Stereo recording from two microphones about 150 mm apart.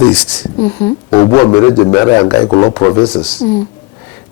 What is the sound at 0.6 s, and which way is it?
Speech, 30° left (ahead or behind).